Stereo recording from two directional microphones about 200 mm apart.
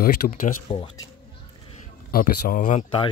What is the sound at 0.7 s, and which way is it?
Speech, 25° left (ahead or behind).